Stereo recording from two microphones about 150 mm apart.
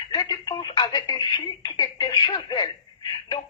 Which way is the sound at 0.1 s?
25° left (ahead or behind).